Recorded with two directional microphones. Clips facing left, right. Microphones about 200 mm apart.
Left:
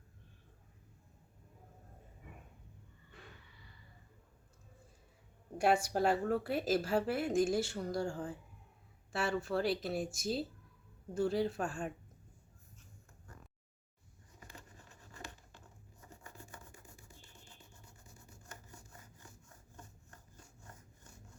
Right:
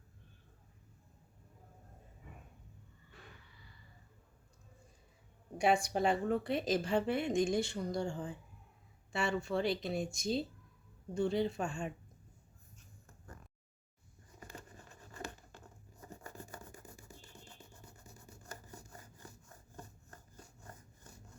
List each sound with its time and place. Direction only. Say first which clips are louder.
5.5 s speech: even; 5° left (ahead or behind)
14.3 s vehicle: right 4 dB; 40° right (ahead or behind)
15.1 s a sound: right 5 dB; 50° right (ahead or behind)
18.1 s rub: right 3 dB; 35° right (ahead or behind)